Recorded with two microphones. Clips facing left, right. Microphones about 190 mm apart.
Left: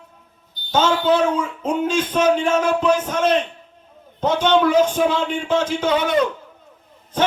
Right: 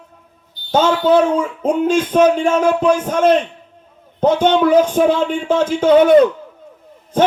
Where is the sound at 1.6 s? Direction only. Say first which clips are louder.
Right 5 dB; 50° right (ahead or behind).